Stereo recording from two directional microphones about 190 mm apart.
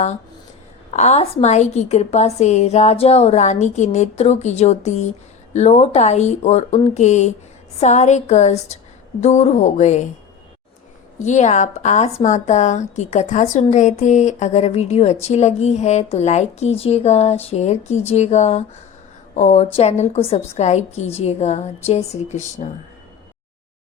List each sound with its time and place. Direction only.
0.9 s a woman's voice: 35° left (ahead or behind)
11.2 s a woman's voice: 40° left (ahead or behind)